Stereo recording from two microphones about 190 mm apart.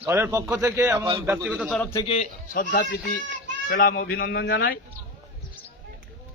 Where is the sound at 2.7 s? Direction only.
65° left (ahead or behind).